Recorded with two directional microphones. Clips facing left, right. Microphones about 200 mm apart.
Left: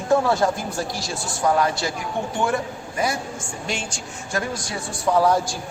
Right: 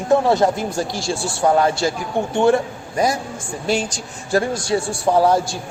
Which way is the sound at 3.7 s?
40° right (ahead or behind).